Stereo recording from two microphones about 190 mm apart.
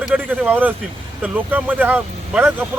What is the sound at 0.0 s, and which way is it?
Speech, 5° right (ahead or behind).